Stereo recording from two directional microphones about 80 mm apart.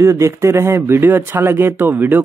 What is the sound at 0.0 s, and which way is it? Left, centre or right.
Speech, right.